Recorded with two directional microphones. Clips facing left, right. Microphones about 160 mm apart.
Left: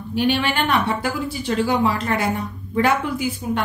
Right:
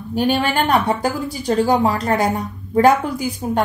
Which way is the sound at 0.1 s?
40° right (ahead or behind).